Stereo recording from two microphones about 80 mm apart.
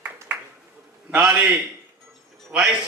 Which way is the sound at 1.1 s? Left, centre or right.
Centre.